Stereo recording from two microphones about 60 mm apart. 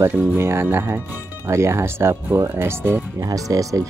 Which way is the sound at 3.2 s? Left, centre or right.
Right.